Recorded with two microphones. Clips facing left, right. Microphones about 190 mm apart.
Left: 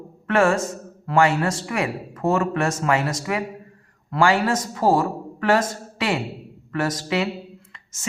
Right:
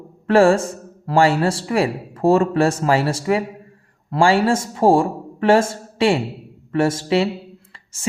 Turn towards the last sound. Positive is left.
turn(degrees=-30)  # may be behind; listen again after turning